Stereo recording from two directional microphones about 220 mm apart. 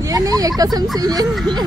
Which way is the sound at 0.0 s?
15° right (ahead or behind).